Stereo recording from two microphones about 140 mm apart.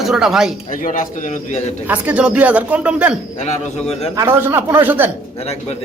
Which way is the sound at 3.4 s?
50° left (ahead or behind).